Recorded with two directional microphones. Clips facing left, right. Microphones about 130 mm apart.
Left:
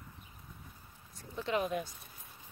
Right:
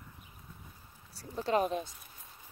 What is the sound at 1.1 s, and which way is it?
Speech, 35° right (ahead or behind).